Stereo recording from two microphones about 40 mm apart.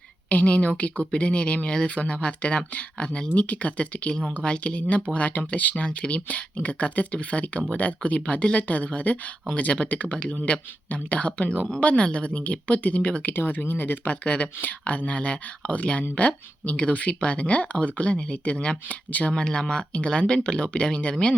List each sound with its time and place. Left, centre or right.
0.3 s speech: left
3.3 s speech: left
4.1 s speech: left
5.7 s speech: left
13.2 s speech: left
14.1 s speech: left